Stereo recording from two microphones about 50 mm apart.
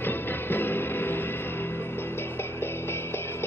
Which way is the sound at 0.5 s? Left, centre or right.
Left.